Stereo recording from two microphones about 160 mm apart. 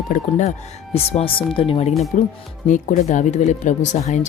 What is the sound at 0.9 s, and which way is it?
Speech, 40° left (ahead or behind).